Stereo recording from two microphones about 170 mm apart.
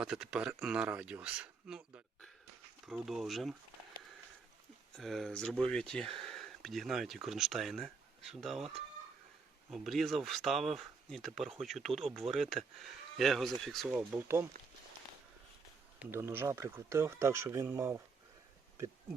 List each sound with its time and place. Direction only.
0.0 s speech: 5° right (ahead or behind)
2.8 s speech: centre (ahead or behind)
4.9 s speech: centre (ahead or behind)
14.2 s speech: 15° right (ahead or behind)
16.0 s speech: 15° right (ahead or behind)